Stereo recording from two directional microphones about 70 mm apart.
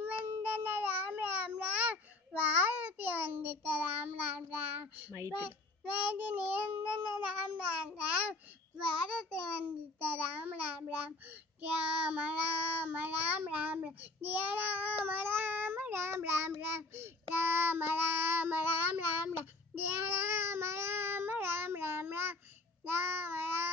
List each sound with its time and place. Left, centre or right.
0.0 s meow: right
5.3 s child singing: right
8.0 s babbling: centre
9.2 s a child's voice: centre
9.9 s child singing: right